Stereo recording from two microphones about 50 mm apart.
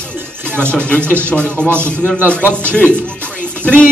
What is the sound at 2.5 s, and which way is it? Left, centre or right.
Speech, left.